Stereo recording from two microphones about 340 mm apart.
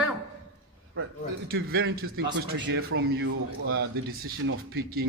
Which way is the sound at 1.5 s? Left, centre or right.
Right.